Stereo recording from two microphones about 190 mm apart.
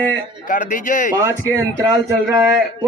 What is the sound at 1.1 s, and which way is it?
Speech, 15° right (ahead or behind).